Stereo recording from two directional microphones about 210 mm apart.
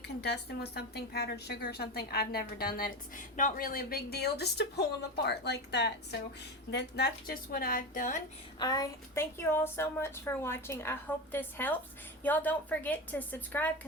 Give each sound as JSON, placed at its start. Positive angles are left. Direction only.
{"t": 0.2, "sound": "speech", "side_deg": 50}
{"t": 8.5, "sound": "a woman's voice", "side_deg": 20}